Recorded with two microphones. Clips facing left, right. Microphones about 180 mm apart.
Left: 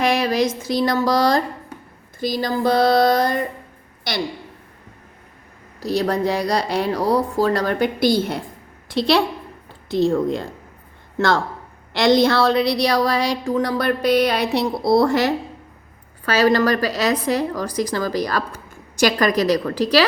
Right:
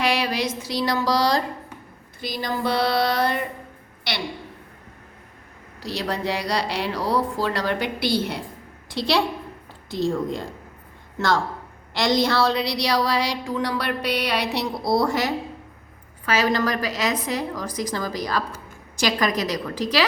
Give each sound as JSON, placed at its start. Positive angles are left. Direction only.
{"t": 0.0, "sound": "music", "side_deg": 45}
{"t": 2.2, "sound": "a woman's voice", "side_deg": 45}
{"t": 5.8, "sound": "a woman's voice", "side_deg": 45}
{"t": 8.9, "sound": "a woman's voice", "side_deg": 60}
{"t": 11.9, "sound": "a woman's voice", "side_deg": 60}
{"t": 16.4, "sound": "a woman's voice", "side_deg": 70}